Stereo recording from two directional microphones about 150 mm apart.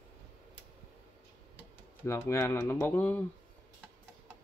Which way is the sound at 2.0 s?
20° left (ahead or behind).